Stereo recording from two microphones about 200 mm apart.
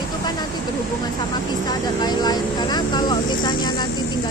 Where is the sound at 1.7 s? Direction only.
20° left (ahead or behind).